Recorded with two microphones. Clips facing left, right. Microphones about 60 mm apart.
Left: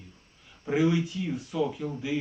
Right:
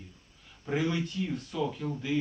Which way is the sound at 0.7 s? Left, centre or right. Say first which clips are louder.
Left 5 dB; centre.